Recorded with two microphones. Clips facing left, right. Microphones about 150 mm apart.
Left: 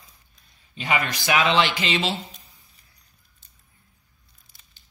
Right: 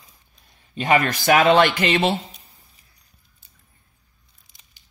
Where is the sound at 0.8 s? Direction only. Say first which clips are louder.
Right 6 dB; 50° right (ahead or behind).